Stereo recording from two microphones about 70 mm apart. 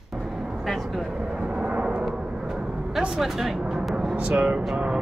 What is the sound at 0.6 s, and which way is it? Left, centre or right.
Speech, centre.